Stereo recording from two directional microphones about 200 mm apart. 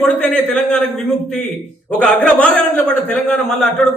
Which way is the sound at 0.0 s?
5° left (ahead or behind).